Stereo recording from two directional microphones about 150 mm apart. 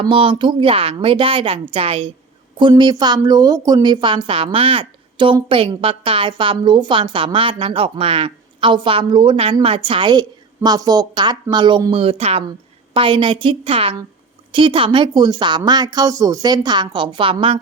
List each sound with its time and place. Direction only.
0.0 s a woman's voice: 35° right (ahead or behind)